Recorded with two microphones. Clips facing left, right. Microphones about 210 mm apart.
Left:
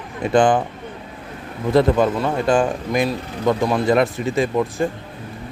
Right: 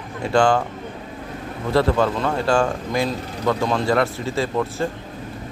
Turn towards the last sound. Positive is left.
turn(degrees=15)  # may be behind; listen again after turning